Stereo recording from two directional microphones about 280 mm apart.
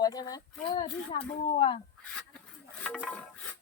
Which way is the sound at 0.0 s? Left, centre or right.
Centre.